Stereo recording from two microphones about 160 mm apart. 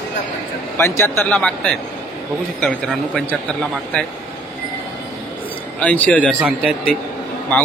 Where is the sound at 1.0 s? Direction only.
5° left (ahead or behind).